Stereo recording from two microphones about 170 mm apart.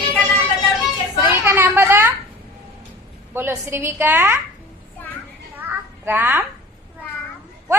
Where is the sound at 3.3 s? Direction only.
15° right (ahead or behind).